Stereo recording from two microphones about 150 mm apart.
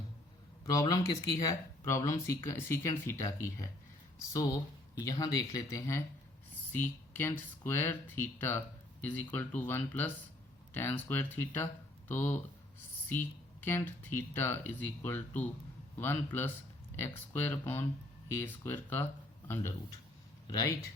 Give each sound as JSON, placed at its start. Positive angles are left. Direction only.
{"t": 0.6, "sound": "speech", "side_deg": 25}
{"t": 20.5, "sound": "speech", "side_deg": 25}